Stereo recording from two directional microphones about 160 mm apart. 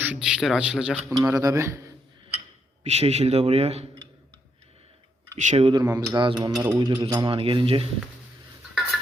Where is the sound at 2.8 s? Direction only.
45° right (ahead or behind).